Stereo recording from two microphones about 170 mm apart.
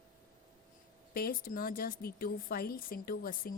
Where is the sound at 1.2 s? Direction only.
60° left (ahead or behind).